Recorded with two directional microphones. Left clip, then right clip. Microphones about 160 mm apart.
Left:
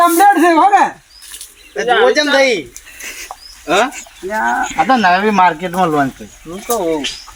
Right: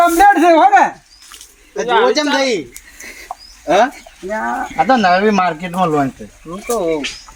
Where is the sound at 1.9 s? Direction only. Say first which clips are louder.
Left 2 dB; 30° right (ahead or behind).